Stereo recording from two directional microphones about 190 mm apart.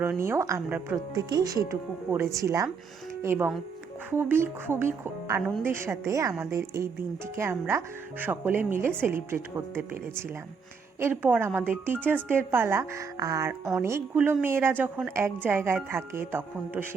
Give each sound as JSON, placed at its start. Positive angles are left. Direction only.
{"t": 0.0, "sound": "speech", "side_deg": -10}
{"t": 11.0, "sound": "speech", "side_deg": -10}